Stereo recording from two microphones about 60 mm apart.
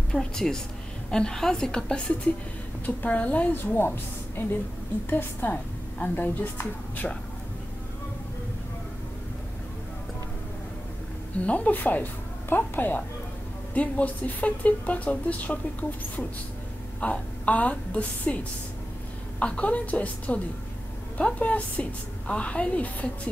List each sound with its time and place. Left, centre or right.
0.1 s a woman's voice: centre
3.0 s speech: left
11.3 s speech: left
17.0 s speech: left
19.4 s speech: left